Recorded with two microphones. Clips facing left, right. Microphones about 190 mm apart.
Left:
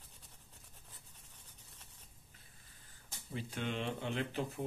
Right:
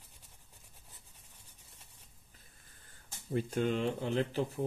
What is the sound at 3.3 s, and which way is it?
Speech, 45° right (ahead or behind).